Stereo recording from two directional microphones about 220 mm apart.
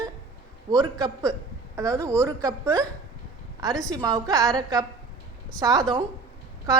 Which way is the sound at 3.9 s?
15° right (ahead or behind).